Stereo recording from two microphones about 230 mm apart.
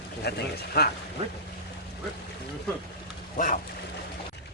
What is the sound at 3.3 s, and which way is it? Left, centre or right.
Speech, left.